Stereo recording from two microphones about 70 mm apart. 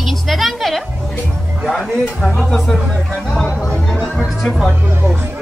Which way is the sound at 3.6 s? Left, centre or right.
Centre.